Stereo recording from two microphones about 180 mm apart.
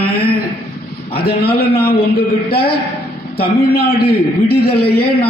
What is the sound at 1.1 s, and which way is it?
A man's voice, 60° left (ahead or behind).